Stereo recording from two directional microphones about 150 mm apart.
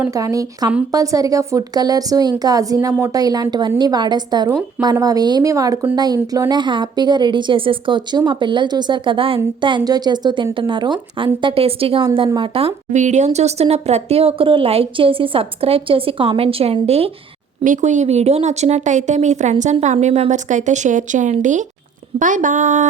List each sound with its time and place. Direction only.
0.1 s a woman's voice: 25° right (ahead or behind); by 17.1 s 40° right (ahead or behind)
17.6 s a woman's voice: 55° right (ahead or behind)